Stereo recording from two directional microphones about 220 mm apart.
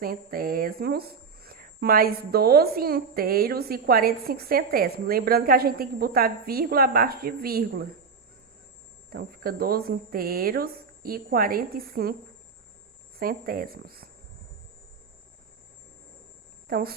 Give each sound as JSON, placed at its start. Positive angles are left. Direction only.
{"t": 0.0, "sound": "speech", "side_deg": -45}
{"t": 9.0, "sound": "speech", "side_deg": -40}
{"t": 13.1, "sound": "speech", "side_deg": -40}
{"t": 16.6, "sound": "speech", "side_deg": -40}